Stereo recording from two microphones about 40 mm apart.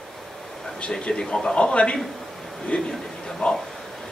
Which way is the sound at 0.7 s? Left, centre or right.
Left.